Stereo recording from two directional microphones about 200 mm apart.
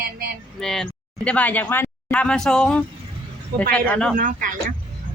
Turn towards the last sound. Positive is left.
turn(degrees=-45)  # may be behind; listen again after turning